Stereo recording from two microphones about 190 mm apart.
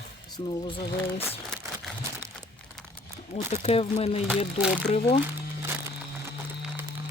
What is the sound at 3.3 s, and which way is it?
Speech, 30° left (ahead or behind).